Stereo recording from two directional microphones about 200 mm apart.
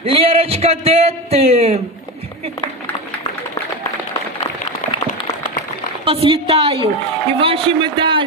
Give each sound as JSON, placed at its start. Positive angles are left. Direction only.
{"t": 0.0, "sound": "a man's voice", "side_deg": -30}
{"t": 6.1, "sound": "a man's voice", "side_deg": -25}